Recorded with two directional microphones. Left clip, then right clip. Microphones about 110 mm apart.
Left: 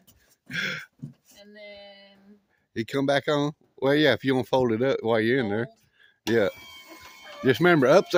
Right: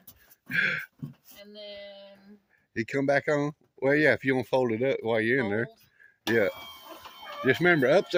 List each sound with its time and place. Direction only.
0.4 s a sound: 25° left (ahead or behind)
1.5 s female singing: 35° left (ahead or behind)
2.7 s speech: 30° left (ahead or behind)
3.8 s speech: 50° left (ahead or behind); by 5.4 s 90° left
5.4 s speech: 30° left (ahead or behind)
6.2 s speech: 40° left (ahead or behind)
7.4 s speech: 75° left (ahead or behind)